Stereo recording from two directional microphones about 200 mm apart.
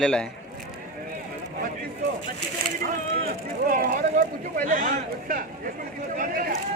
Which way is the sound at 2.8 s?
45° right (ahead or behind).